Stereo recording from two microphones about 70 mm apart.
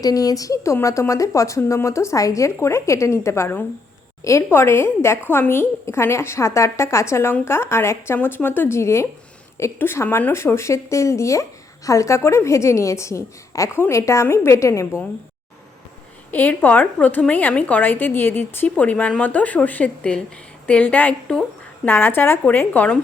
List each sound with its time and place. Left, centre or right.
0.0 s a woman's voice: left
4.4 s a woman's voice: left
16.3 s a woman's voice: left